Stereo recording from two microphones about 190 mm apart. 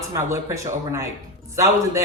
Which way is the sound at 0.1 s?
15° right (ahead or behind).